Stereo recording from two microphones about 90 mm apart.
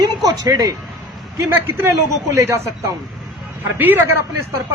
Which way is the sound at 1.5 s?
25° right (ahead or behind).